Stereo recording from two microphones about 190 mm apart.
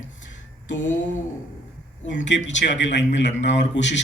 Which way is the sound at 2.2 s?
70° left (ahead or behind).